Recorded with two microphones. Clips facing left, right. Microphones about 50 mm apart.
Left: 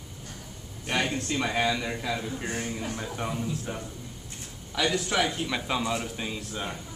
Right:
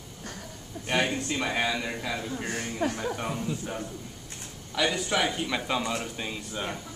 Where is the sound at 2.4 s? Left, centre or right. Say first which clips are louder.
Left 1 dB; centre.